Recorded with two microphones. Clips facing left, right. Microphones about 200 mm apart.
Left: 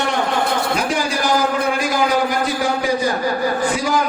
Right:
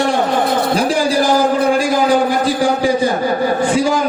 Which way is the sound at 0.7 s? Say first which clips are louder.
Right 5 dB; 30° right (ahead or behind).